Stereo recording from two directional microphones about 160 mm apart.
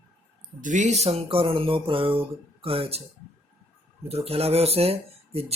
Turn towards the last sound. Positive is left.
turn(degrees=-40)  # may be behind; listen again after turning